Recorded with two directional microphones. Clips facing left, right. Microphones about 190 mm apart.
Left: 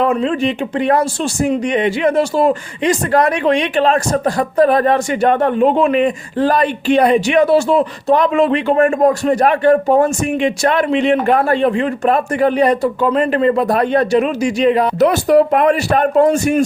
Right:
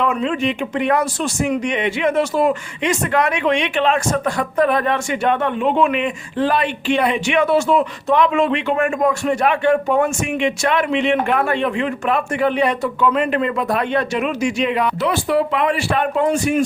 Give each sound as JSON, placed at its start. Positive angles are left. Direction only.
{"t": 0.0, "sound": "speech", "side_deg": 35}